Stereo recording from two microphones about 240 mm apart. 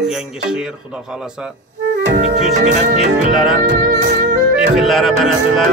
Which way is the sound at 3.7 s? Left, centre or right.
Right.